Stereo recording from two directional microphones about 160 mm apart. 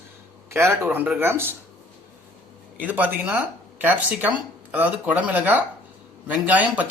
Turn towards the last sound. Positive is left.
turn(degrees=-10)  # may be behind; listen again after turning